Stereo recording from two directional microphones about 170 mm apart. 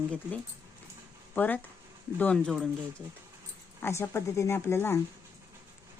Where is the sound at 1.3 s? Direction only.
10° left (ahead or behind).